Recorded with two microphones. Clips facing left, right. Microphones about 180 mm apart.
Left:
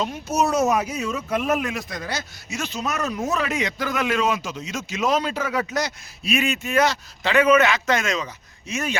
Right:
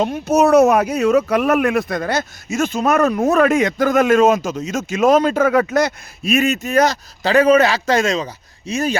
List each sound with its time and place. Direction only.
0.0 s speech: 55° right (ahead or behind); by 9.0 s 35° right (ahead or behind)